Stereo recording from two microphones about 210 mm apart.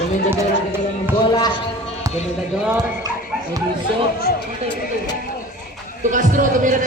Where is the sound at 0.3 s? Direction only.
10° right (ahead or behind).